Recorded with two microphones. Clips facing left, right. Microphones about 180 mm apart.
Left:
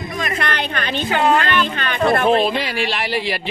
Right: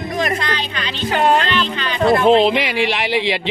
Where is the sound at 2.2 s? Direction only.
20° right (ahead or behind).